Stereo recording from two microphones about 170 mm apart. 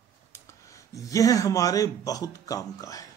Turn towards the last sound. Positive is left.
turn(degrees=20)  # may be behind; listen again after turning